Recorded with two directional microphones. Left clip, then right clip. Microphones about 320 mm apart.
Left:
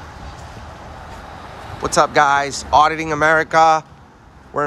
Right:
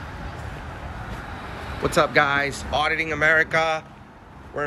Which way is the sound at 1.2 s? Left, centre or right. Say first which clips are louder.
Left 1 dB; left.